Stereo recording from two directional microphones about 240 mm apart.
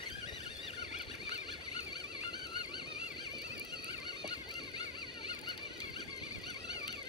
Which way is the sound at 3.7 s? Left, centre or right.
Centre.